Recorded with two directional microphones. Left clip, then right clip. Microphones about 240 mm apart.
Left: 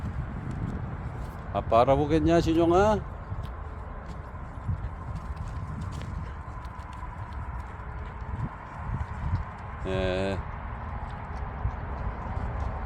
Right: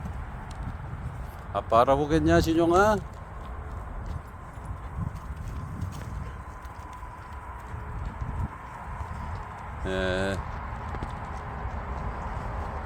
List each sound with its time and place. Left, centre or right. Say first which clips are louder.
1.5 s speech: even; centre
9.8 s vehicle: right 1 dB; centre